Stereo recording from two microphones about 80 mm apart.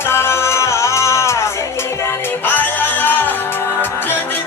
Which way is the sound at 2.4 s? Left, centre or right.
Left.